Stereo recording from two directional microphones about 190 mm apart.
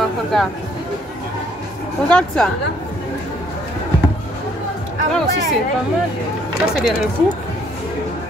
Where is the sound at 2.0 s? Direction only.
5° left (ahead or behind).